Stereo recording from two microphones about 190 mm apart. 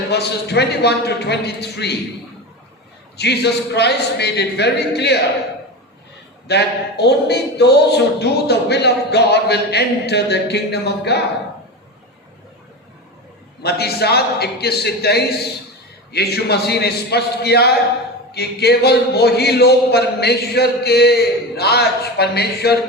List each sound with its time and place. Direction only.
0.1 s speech: 60° left (ahead or behind)
3.2 s speech: 60° left (ahead or behind)
6.5 s speech: 60° left (ahead or behind)
13.6 s speech: 55° left (ahead or behind)